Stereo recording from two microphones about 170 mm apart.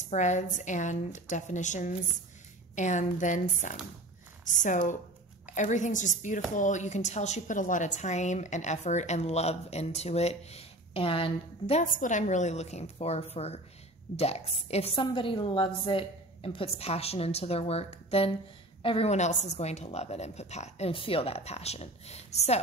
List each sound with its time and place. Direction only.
0.1 s a woman's voice: 45° left (ahead or behind)
11.8 s a woman's voice: 50° left (ahead or behind)